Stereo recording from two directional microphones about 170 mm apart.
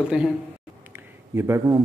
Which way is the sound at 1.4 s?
15° right (ahead or behind).